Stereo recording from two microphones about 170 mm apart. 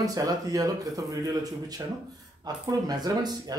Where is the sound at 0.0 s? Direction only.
20° right (ahead or behind).